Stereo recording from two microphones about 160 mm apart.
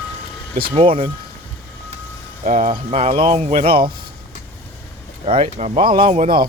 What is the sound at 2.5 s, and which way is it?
Speech, 50° right (ahead or behind).